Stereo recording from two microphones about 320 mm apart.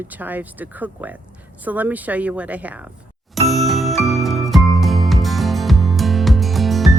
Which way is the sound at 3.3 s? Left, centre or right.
Centre.